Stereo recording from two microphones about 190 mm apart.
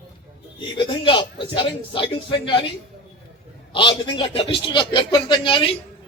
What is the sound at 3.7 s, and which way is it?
A man's voice, 25° left (ahead or behind).